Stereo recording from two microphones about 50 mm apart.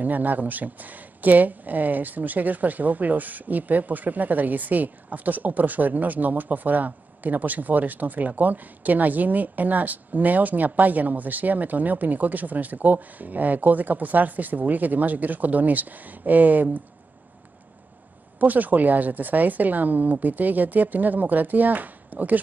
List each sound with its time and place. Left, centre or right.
0.0 s speech: right
18.4 s speech: right